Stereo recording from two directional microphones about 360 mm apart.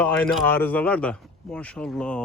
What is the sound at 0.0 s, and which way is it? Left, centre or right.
Speech, centre.